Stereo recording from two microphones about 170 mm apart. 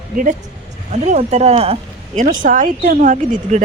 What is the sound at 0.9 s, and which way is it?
Speech, 40° right (ahead or behind).